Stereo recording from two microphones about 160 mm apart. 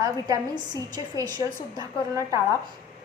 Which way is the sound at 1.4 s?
20° right (ahead or behind).